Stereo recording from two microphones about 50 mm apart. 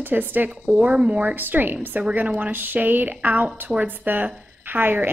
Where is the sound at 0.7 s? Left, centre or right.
Right.